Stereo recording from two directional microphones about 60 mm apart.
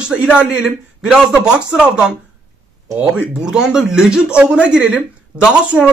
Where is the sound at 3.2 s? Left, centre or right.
Centre.